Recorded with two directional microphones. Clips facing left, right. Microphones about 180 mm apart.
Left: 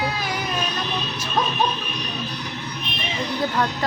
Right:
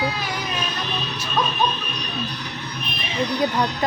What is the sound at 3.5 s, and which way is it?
Speech, 15° right (ahead or behind).